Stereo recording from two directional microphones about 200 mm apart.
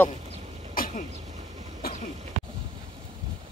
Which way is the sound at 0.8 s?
45° left (ahead or behind).